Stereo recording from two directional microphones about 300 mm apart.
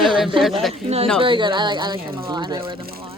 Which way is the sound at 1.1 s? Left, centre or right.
Centre.